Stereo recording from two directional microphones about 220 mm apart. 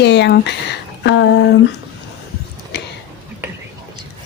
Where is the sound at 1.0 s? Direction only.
55° left (ahead or behind).